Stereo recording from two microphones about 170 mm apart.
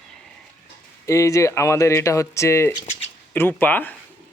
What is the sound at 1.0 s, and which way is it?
Speech, 20° left (ahead or behind).